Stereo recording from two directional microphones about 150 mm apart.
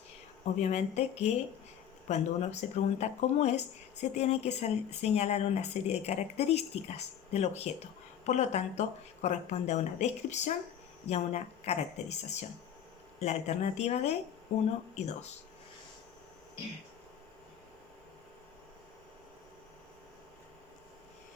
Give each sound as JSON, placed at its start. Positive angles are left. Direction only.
{"t": 0.6, "sound": "speech", "side_deg": 45}